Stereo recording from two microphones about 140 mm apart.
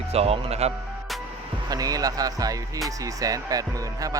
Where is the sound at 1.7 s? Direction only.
25° right (ahead or behind).